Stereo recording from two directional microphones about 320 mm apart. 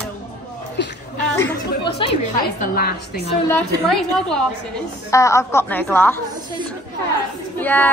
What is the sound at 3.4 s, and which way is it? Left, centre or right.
A woman's voice, centre.